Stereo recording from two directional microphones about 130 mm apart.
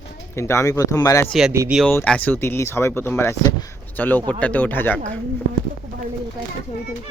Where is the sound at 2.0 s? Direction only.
10° left (ahead or behind).